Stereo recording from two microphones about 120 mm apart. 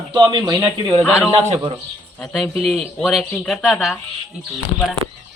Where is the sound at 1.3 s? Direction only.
60° right (ahead or behind).